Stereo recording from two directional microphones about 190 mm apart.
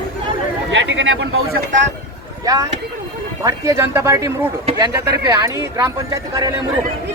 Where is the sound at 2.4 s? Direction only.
20° right (ahead or behind).